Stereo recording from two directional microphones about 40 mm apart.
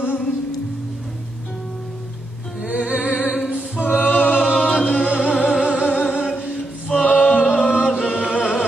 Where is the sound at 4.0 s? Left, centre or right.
Left.